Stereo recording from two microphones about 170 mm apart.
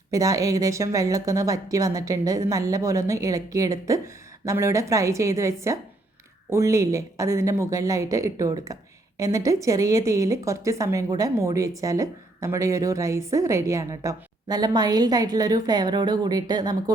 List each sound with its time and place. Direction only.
0.1 s a woman's voice: 20° right (ahead or behind)